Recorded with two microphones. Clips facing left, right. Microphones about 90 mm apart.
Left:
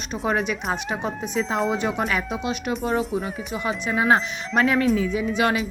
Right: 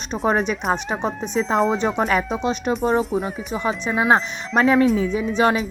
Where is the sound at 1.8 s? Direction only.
35° right (ahead or behind).